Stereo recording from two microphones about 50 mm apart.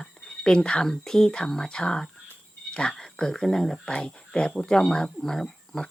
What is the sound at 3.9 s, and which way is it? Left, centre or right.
Speech, centre.